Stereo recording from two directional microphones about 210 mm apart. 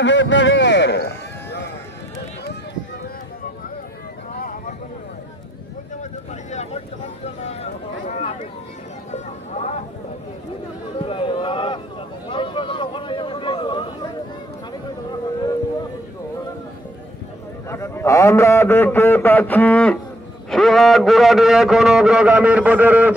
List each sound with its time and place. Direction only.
0.0 s run: 60° left (ahead or behind)
4.3 s vehicle: 40° left (ahead or behind)
6.5 s vehicle: 30° left (ahead or behind)
7.4 s a sound: 30° left (ahead or behind)
11.0 s a sound: 25° left (ahead or behind)
17.6 s a man's voice: 15° left (ahead or behind); by 23.1 s 5° right (ahead or behind)